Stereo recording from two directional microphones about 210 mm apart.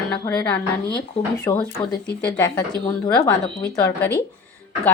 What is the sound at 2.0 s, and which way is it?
Speech, 5° left (ahead or behind).